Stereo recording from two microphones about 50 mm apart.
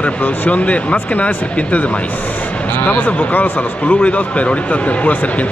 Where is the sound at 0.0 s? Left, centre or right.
Left.